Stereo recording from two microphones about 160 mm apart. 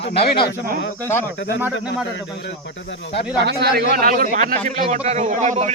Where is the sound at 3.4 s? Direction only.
85° right.